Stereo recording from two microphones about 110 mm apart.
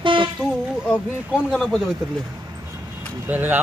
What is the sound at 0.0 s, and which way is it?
Vehicle, 50° right (ahead or behind).